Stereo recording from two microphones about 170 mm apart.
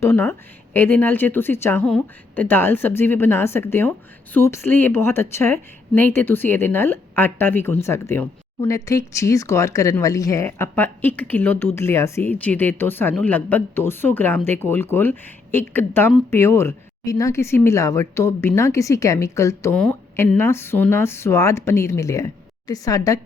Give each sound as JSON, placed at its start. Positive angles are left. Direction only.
{"t": 0.0, "sound": "a woman's voice", "side_deg": 15}